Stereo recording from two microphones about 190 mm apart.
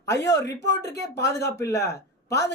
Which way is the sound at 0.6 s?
60° left (ahead or behind).